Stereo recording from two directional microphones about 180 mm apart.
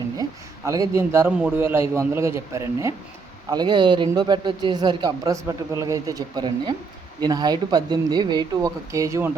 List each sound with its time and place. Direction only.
0.2 s a man's voice: 20° right (ahead or behind)